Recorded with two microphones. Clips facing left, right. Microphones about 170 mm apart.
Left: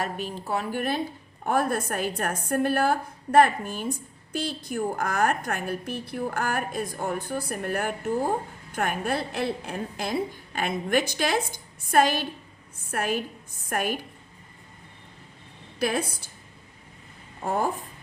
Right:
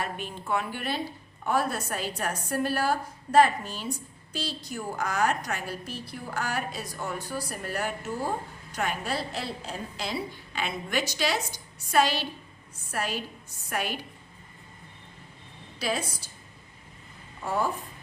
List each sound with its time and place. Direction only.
0.0 s a woman's voice: 40° left (ahead or behind)
15.8 s a woman's voice: 55° left (ahead or behind)
17.4 s speech: 50° left (ahead or behind)